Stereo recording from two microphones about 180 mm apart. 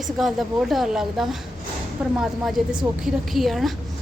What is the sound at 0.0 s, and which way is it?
A woman's voice, centre (ahead or behind).